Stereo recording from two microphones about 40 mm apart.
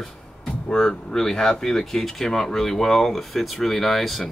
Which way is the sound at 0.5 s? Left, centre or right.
Centre.